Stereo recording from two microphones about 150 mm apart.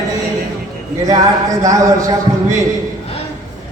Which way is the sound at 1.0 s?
25° right (ahead or behind).